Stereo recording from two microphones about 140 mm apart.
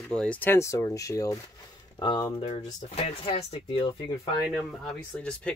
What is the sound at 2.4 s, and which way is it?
Speech, 50° left (ahead or behind).